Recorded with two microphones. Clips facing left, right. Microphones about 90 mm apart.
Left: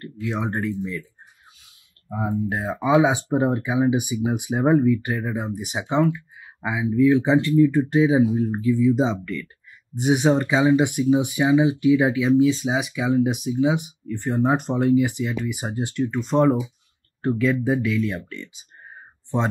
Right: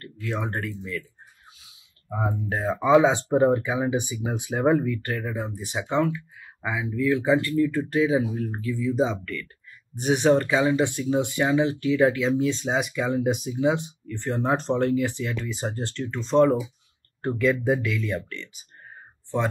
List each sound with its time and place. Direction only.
0.0 s speech: 15° left (ahead or behind)
2.0 s speech: 10° left (ahead or behind)
13.8 s speech: 15° left (ahead or behind)
17.2 s speech: centre (ahead or behind)